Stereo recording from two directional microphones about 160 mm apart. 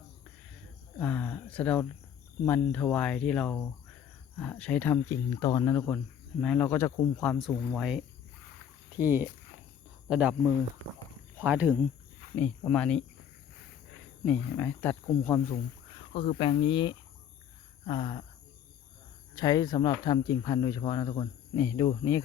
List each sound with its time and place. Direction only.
0.9 s speech: 10° left (ahead or behind)
5.7 s speech: 10° left (ahead or behind)
9.0 s speech: 15° right (ahead or behind)
11.3 s speech: 10° right (ahead or behind)
12.6 s speech: 5° left (ahead or behind)
14.3 s speech: 10° left (ahead or behind)
16.0 s a sound: 35° left (ahead or behind)
16.4 s speech: 30° left (ahead or behind)
19.4 s speech: 25° left (ahead or behind)